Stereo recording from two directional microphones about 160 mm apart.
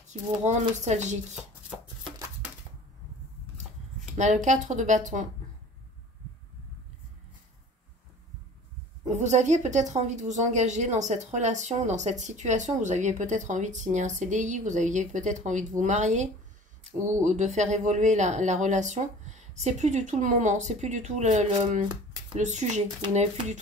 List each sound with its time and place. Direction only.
0.5 s speech: 45° right (ahead or behind)
2.0 s a sound: 25° right (ahead or behind)
4.1 s speech: 50° right (ahead or behind)
9.1 s speech: 50° right (ahead or behind)